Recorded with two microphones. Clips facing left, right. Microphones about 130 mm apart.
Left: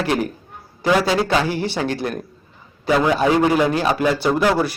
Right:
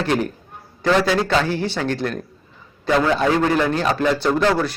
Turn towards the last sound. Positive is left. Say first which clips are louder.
# left 1 dB
turn(degrees=10)  # may be behind; listen again after turning